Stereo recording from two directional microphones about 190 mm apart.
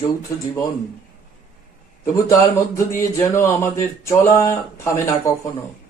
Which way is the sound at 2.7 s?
15° left (ahead or behind).